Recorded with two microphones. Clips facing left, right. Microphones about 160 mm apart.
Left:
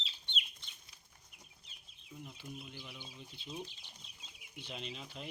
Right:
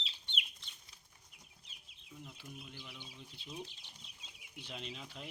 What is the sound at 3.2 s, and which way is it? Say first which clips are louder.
Speech: left 2 dB; centre (ahead or behind).